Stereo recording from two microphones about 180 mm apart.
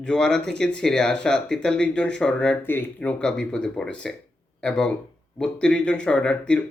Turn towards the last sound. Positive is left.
turn(degrees=5)  # may be behind; listen again after turning